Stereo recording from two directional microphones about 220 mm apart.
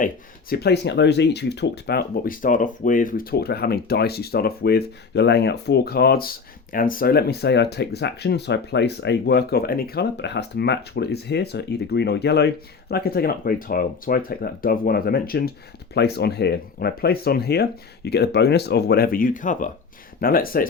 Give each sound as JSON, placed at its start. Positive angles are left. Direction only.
{"t": 0.5, "sound": "speech", "side_deg": 50}